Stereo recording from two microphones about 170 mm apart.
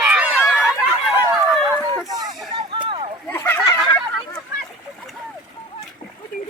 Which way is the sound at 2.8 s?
30° right (ahead or behind).